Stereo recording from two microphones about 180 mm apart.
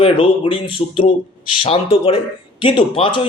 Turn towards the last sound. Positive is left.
turn(degrees=30)  # may be behind; listen again after turning